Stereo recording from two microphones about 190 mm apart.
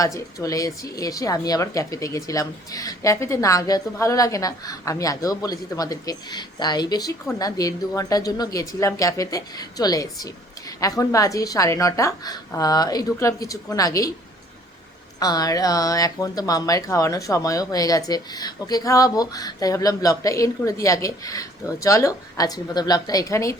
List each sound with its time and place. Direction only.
0.0 s a woman's voice: 15° left (ahead or behind)
15.2 s speech: 20° left (ahead or behind)